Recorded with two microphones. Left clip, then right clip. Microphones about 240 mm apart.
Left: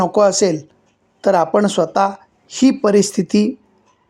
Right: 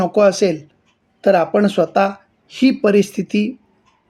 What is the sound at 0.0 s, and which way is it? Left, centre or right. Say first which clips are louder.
A man's voice: even; centre.